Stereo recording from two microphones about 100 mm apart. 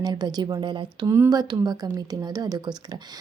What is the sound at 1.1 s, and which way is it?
A woman's voice, 30° right (ahead or behind).